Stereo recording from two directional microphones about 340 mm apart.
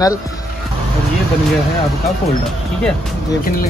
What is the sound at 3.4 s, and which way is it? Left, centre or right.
Speech, left.